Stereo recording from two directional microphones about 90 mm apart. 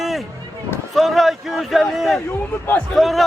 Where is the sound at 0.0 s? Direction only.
Centre (ahead or behind).